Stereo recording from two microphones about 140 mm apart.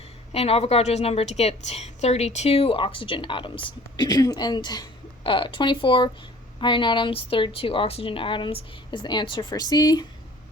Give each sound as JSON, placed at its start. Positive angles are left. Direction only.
{"t": 0.3, "sound": "a woman's voice", "side_deg": 45}